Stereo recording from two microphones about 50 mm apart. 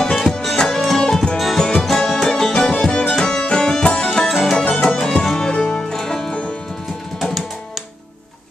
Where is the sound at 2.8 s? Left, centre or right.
Centre.